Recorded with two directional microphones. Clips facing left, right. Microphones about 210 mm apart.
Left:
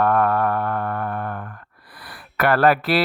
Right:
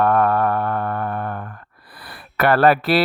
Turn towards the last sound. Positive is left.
turn(degrees=-30)  # may be behind; listen again after turning